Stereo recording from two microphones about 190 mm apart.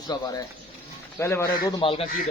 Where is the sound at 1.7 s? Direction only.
25° left (ahead or behind).